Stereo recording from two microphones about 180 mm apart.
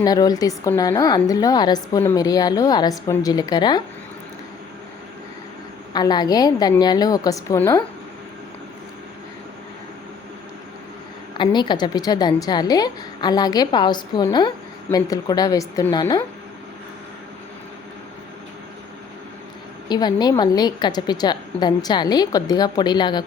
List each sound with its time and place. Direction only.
0.0 s a woman's voice: 20° left (ahead or behind)
5.9 s a woman's voice: 20° left (ahead or behind)
11.3 s a woman's voice: 25° left (ahead or behind)
19.9 s a woman's voice: 25° left (ahead or behind)